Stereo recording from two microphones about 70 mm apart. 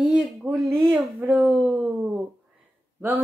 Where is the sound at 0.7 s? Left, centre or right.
Right.